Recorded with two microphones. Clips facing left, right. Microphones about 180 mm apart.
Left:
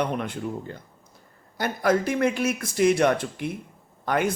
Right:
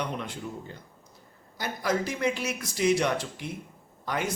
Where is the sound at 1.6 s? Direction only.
55° left (ahead or behind).